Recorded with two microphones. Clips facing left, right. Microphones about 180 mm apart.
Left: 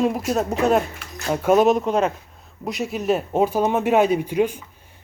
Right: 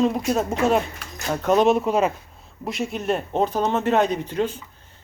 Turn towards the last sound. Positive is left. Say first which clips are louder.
# left 4 dB
turn(degrees=10)  # may be behind; listen again after turning